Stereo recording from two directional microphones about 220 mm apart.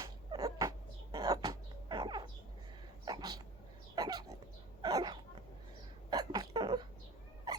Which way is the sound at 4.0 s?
15° right (ahead or behind).